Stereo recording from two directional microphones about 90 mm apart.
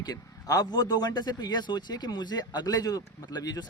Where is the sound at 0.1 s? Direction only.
45° left (ahead or behind).